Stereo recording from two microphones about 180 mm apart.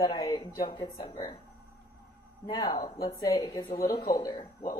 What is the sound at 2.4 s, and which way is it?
A woman's voice, 25° left (ahead or behind).